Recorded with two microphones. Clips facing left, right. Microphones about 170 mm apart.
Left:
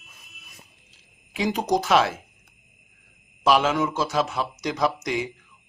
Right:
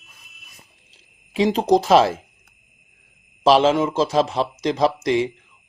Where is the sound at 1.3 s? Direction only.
30° right (ahead or behind).